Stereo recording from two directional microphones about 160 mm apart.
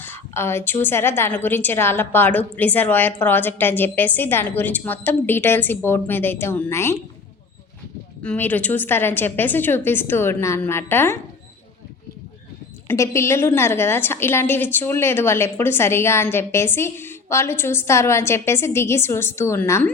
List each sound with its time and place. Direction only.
0.0 s a woman's voice: 15° left (ahead or behind)
8.2 s a woman's voice: 10° left (ahead or behind)
12.9 s a woman's voice: 15° left (ahead or behind)